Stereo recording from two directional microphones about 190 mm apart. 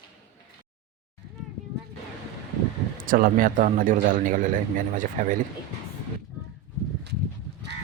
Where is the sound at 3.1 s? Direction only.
50° right (ahead or behind).